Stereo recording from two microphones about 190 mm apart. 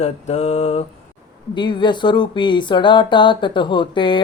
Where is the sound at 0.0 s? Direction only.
35° left (ahead or behind).